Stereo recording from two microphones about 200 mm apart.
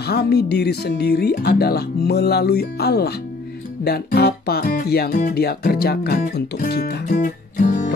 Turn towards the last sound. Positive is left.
turn(degrees=40)  # may be behind; listen again after turning